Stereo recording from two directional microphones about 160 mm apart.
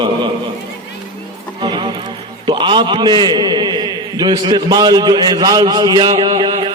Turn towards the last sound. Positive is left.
turn(degrees=-25)  # may be behind; listen again after turning